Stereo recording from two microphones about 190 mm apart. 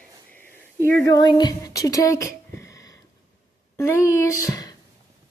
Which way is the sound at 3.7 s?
15° left (ahead or behind).